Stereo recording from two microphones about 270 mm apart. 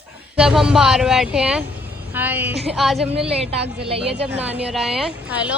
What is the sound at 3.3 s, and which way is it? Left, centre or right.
A woman's voice, right.